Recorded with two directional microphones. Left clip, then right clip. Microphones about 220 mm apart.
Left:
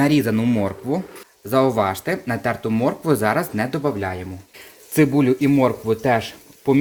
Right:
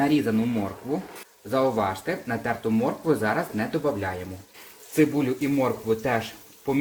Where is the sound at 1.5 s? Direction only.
50° left (ahead or behind).